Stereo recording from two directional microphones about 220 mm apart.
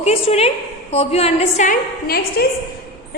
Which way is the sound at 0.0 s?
25° left (ahead or behind).